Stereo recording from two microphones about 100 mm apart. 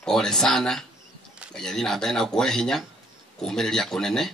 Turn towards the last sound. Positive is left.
turn(degrees=5)  # may be behind; listen again after turning